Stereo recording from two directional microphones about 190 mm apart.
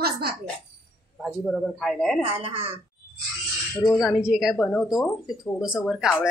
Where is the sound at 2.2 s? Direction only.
30° right (ahead or behind).